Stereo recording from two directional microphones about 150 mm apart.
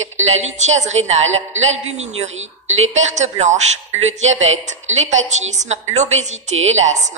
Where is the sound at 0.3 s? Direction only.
50° right (ahead or behind).